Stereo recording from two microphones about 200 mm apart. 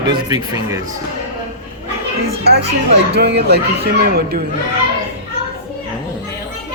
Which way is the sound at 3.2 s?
55° right (ahead or behind).